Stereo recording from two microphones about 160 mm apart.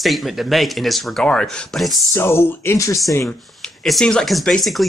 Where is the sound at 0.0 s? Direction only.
Centre (ahead or behind).